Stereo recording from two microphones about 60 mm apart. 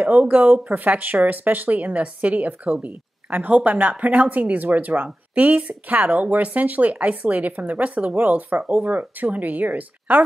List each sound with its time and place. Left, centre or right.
0.0 s speech: right